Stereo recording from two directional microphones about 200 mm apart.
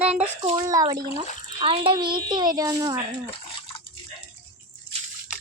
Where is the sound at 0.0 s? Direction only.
5° right (ahead or behind).